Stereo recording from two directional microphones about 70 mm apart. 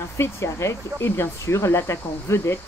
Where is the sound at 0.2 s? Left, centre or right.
Left.